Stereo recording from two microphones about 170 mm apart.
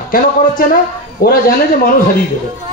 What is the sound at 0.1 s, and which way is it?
A man's voice, 55° left (ahead or behind).